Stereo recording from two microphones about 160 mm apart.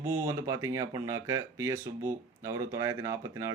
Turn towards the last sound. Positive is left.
turn(degrees=-20)  # may be behind; listen again after turning